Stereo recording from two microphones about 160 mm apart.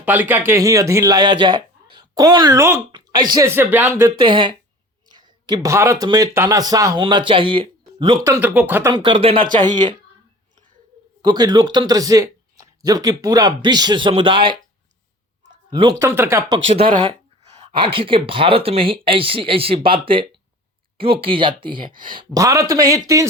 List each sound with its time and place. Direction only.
0.0 s speech: 10° right (ahead or behind)
4.2 s speech: 30° right (ahead or behind)
8.2 s speech: 15° right (ahead or behind)
8.9 s speech: 30° right (ahead or behind)
11.2 s speech: 25° right (ahead or behind)
15.7 s speech: 30° right (ahead or behind)
16.0 s speech: 15° right (ahead or behind)
16.7 s speech: 35° right (ahead or behind)